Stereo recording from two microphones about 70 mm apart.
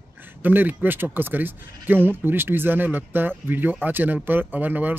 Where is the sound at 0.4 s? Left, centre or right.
Right.